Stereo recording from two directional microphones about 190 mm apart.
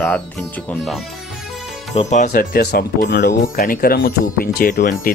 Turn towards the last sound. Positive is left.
turn(degrees=50)  # may be behind; listen again after turning